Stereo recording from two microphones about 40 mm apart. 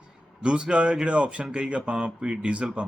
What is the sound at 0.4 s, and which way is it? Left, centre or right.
Speech, right.